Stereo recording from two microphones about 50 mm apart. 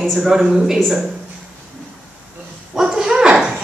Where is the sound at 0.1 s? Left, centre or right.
Centre.